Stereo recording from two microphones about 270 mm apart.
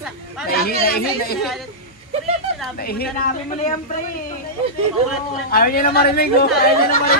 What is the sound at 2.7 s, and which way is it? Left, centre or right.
Speech, left.